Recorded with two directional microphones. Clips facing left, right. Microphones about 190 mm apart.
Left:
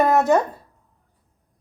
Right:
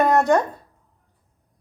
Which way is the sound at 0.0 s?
5° left (ahead or behind).